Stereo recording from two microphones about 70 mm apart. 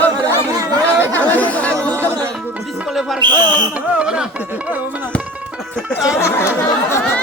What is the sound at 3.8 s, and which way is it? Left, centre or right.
Music, centre.